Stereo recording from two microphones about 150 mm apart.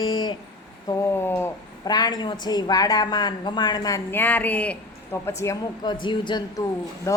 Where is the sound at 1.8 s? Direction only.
25° left (ahead or behind).